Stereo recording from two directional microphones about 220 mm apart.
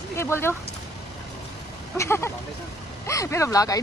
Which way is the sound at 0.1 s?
10° left (ahead or behind).